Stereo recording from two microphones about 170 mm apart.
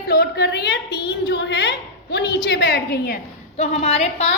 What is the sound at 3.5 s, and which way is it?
Speech, 40° left (ahead or behind).